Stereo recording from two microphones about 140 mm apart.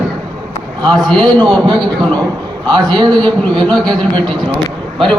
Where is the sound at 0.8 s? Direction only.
30° right (ahead or behind).